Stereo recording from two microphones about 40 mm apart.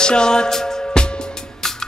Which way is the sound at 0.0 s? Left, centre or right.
Centre.